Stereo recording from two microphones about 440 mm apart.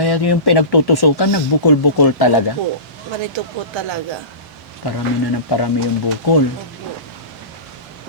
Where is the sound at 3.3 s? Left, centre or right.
Right.